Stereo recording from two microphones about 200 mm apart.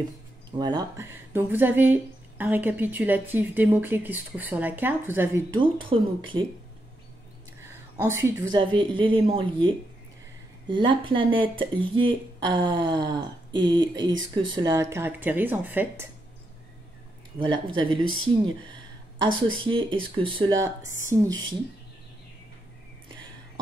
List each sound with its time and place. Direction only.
0.5 s speech: 20° right (ahead or behind)
5.6 s speech: 25° right (ahead or behind)
7.6 s speech: 15° right (ahead or behind)
10.7 s speech: 25° right (ahead or behind); by 16.1 s 10° right (ahead or behind)
17.7 s speech: 25° right (ahead or behind)
19.5 s speech: 25° right (ahead or behind)